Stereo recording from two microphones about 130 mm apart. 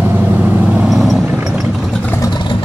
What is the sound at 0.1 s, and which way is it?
Vehicle, 10° right (ahead or behind).